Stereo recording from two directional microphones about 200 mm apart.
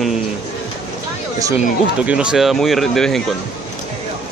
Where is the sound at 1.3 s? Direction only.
15° right (ahead or behind).